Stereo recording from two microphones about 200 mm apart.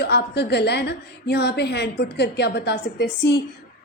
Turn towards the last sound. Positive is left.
turn(degrees=60)  # may be behind; listen again after turning